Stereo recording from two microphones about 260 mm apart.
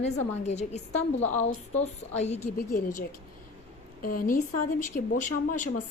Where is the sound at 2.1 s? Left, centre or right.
Left.